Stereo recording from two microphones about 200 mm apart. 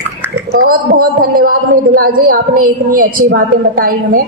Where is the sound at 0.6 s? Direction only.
45° right (ahead or behind).